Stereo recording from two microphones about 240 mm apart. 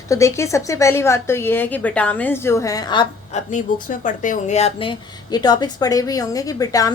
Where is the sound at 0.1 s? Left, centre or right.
Centre.